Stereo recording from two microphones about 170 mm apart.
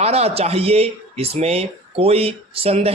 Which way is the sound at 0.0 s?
35° right (ahead or behind).